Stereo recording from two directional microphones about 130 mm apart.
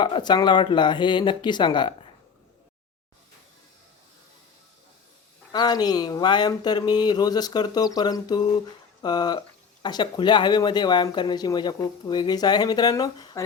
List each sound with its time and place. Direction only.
0.0 s speech: 35° left (ahead or behind)
5.5 s speech: 30° left (ahead or behind)